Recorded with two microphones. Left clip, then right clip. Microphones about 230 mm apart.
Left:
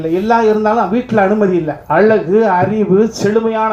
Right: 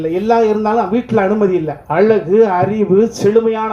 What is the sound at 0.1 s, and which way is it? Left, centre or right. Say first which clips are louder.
Speech: left 2 dB; right.